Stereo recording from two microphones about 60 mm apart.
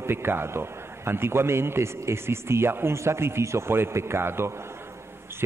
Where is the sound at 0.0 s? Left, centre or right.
Right.